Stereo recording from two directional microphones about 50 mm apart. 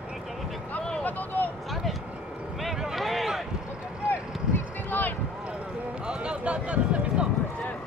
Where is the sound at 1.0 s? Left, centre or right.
Left.